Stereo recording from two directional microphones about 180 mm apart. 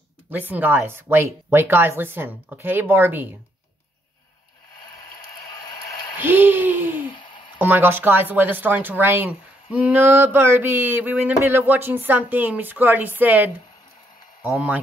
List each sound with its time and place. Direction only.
0.3 s speech: 10° right (ahead or behind)
6.1 s a sound: 10° right (ahead or behind)
7.5 s speech: 10° right (ahead or behind)